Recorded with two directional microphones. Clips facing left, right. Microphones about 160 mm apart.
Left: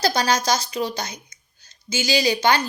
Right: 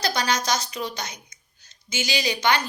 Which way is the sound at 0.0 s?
35° left (ahead or behind).